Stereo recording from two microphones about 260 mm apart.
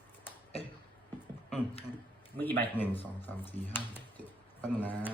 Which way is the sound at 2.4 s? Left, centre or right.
Centre.